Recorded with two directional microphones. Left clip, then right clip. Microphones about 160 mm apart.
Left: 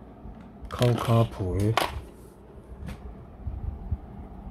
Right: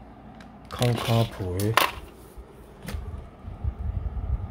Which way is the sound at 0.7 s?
15° left (ahead or behind).